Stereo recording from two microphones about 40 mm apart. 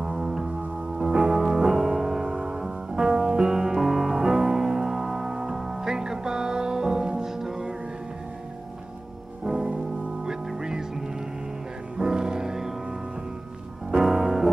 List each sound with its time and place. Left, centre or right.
0.0 s music: centre
9.4 s music: centre
13.9 s music: centre